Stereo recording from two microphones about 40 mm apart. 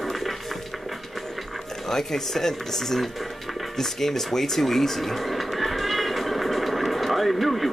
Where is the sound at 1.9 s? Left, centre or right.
Centre.